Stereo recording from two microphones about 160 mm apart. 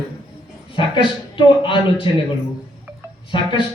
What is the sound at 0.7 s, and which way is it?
A man's voice, 30° left (ahead or behind).